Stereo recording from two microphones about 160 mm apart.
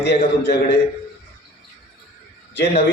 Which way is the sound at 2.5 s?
90° left.